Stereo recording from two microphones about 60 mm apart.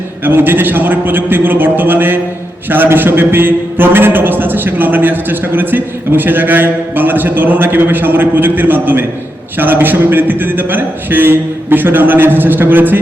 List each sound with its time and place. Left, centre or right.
0.3 s a man's voice: right